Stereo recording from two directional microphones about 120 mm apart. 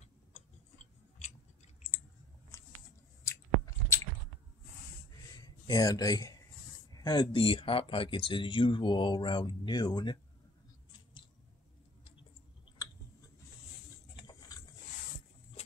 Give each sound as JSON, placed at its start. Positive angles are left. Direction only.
{"t": 0.3, "sound": "tick-tock", "side_deg": 90}
{"t": 3.3, "sound": "chewing", "side_deg": 25}
{"t": 5.4, "sound": "speech", "side_deg": 30}
{"t": 6.9, "sound": "a sound", "side_deg": 30}
{"t": 7.3, "sound": "speech", "side_deg": 45}